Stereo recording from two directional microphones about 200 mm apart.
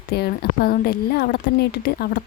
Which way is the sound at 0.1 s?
50° left (ahead or behind).